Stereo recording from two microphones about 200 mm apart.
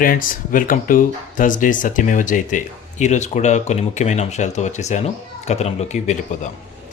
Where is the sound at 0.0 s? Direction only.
45° left (ahead or behind).